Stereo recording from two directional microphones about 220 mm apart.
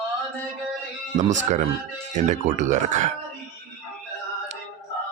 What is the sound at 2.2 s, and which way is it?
Speech, 35° right (ahead or behind).